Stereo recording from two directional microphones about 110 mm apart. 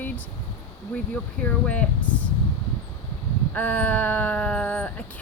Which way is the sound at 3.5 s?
15° left (ahead or behind).